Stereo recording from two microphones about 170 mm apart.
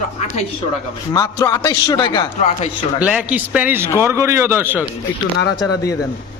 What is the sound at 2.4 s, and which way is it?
Speech, 40° left (ahead or behind).